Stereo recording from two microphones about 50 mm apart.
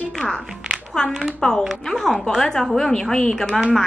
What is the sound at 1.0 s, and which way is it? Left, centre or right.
A woman's voice, centre.